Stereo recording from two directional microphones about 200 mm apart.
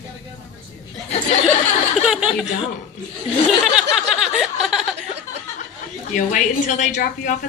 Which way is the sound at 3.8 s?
5° right (ahead or behind).